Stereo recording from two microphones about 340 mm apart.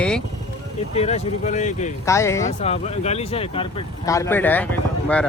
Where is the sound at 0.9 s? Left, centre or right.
Centre.